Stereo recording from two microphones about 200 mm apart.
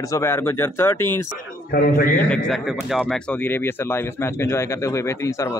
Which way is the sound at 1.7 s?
45° left (ahead or behind).